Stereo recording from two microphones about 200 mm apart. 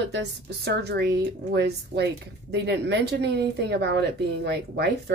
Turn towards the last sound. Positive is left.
turn(degrees=-55)  # may be behind; listen again after turning